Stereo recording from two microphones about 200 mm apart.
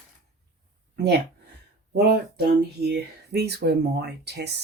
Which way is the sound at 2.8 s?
55° right (ahead or behind).